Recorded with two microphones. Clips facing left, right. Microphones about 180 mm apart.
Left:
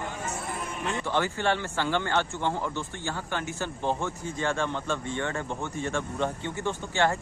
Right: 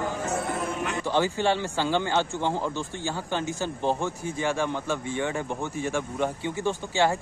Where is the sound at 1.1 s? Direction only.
15° right (ahead or behind).